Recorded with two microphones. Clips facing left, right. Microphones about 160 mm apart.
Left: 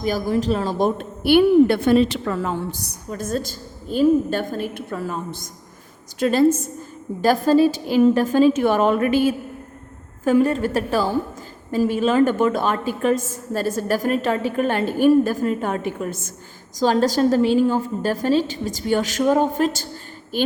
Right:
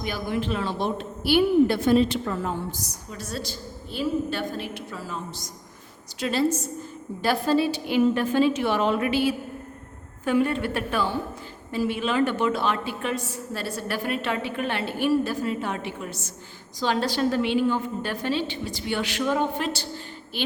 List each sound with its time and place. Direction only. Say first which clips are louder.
0.0 s a woman's voice: left 7 dB; 40° left (ahead or behind)